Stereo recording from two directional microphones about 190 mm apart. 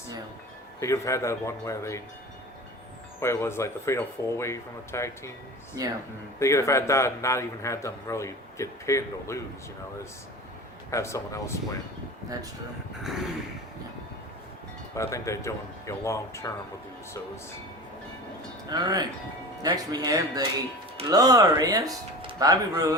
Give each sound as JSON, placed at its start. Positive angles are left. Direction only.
{"t": 0.8, "sound": "a man's voice", "side_deg": 15}
{"t": 3.2, "sound": "a man's voice", "side_deg": 15}
{"t": 5.8, "sound": "speech", "side_deg": -20}
{"t": 6.4, "sound": "a man's voice", "side_deg": 15}
{"t": 10.9, "sound": "a man's voice", "side_deg": 15}
{"t": 13.0, "sound": "a sound", "side_deg": 0}
{"t": 14.9, "sound": "a man's voice", "side_deg": 15}
{"t": 18.7, "sound": "speech", "side_deg": -20}